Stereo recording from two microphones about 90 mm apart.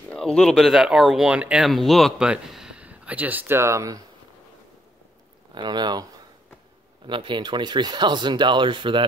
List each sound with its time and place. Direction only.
0.1 s speech: 10° left (ahead or behind); by 1.7 s 10° right (ahead or behind)
1.7 s speech: centre (ahead or behind); by 4.0 s 35° right (ahead or behind)
5.5 s speech: 55° right (ahead or behind)
7.1 s speech: 65° right (ahead or behind)